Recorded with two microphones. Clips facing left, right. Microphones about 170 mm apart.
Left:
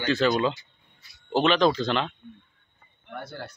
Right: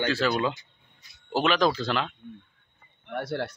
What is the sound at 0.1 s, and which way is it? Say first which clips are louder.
Speech: left 3 dB; 5° right (ahead or behind).